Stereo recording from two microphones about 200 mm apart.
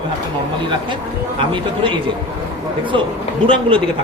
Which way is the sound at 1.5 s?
25° right (ahead or behind).